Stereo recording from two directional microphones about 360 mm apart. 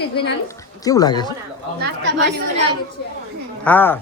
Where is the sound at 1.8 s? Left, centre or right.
Right.